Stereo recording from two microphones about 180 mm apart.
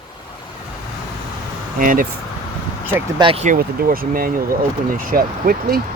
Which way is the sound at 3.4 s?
50° right (ahead or behind).